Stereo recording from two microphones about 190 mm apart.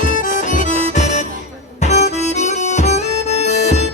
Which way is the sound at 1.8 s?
35° left (ahead or behind).